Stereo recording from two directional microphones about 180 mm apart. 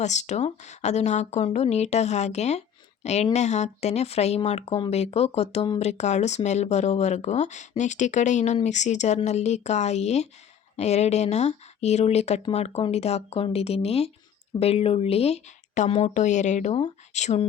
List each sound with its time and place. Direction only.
0.0 s speech: 40° left (ahead or behind)